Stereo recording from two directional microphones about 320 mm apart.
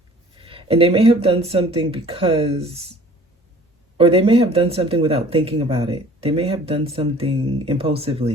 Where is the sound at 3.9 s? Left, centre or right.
Centre.